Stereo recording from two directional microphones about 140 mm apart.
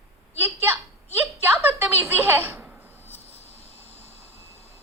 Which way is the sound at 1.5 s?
15° right (ahead or behind).